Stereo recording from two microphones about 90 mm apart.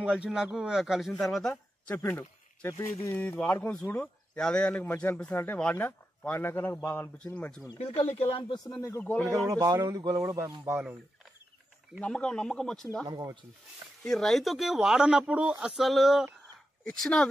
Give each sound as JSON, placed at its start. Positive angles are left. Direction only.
{"t": 0.0, "sound": "speech", "side_deg": -10}
{"t": 2.0, "sound": "speech", "side_deg": 25}
{"t": 3.4, "sound": "speech", "side_deg": 30}
{"t": 3.9, "sound": "speech", "side_deg": 10}
{"t": 7.3, "sound": "speech", "side_deg": 10}
{"t": 7.8, "sound": "speech", "side_deg": 90}
{"t": 9.0, "sound": "speech", "side_deg": 15}
{"t": 9.3, "sound": "speech", "side_deg": -40}
{"t": 10.2, "sound": "speech", "side_deg": -35}
{"t": 12.0, "sound": "speech", "side_deg": 10}
{"t": 13.0, "sound": "speech", "side_deg": -45}
{"t": 14.0, "sound": "speech", "side_deg": 5}